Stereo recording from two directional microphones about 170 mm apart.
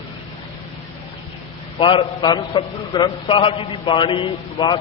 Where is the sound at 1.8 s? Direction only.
30° left (ahead or behind).